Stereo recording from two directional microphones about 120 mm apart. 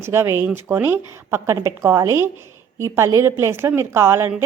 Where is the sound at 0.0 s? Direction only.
20° right (ahead or behind).